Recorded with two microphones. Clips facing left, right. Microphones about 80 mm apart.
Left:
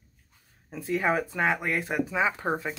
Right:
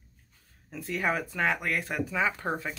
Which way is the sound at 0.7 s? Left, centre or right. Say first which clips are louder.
Left 4 dB; centre.